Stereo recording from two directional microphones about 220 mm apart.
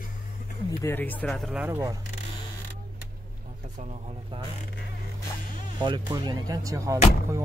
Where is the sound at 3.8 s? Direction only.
30° right (ahead or behind).